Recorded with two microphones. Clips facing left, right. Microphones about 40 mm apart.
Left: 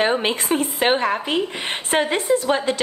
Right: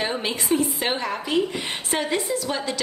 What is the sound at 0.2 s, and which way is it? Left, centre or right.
A woman's voice, left.